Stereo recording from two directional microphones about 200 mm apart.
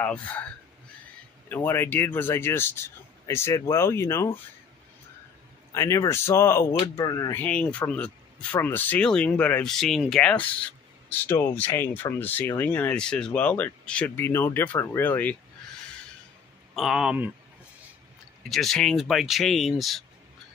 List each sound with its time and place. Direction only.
0.0 s speech: 5° left (ahead or behind)
1.5 s speech: 10° left (ahead or behind)
5.7 s speech: 15° left (ahead or behind)
16.7 s speech: centre (ahead or behind)
18.5 s speech: centre (ahead or behind)